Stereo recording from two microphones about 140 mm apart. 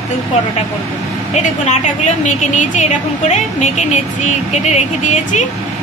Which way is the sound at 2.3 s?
60° left (ahead or behind).